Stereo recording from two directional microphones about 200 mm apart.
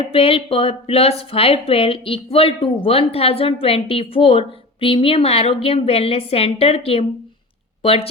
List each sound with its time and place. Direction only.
0.0 s a woman's voice: 30° left (ahead or behind)